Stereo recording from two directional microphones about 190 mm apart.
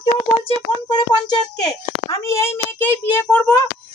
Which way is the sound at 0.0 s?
30° left (ahead or behind).